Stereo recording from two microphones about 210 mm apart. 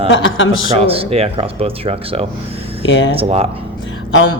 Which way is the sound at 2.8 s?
60° left (ahead or behind).